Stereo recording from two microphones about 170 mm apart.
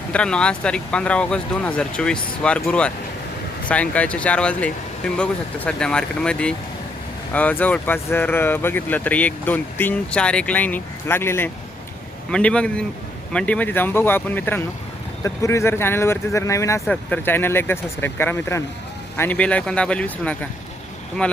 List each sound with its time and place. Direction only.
0.1 s speech: 5° left (ahead or behind)
16.8 s speech: 5° left (ahead or behind)